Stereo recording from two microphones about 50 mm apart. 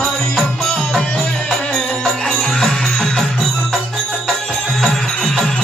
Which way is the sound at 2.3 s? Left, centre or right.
Centre.